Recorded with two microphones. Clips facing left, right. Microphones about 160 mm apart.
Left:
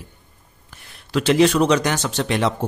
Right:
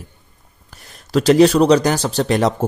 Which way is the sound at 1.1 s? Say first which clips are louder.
Right 4 dB; 40° right (ahead or behind).